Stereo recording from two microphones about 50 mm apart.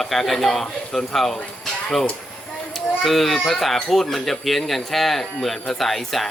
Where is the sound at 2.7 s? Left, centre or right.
Centre.